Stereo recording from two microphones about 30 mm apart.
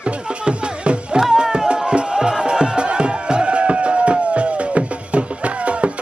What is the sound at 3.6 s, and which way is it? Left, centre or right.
Music, right.